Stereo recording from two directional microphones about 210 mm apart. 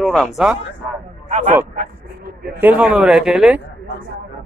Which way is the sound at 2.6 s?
5° right (ahead or behind).